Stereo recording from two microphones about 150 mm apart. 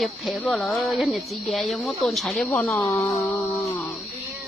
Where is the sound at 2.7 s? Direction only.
20° left (ahead or behind).